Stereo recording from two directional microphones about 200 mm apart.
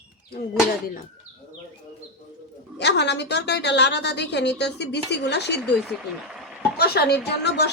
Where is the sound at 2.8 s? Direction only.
55° left (ahead or behind).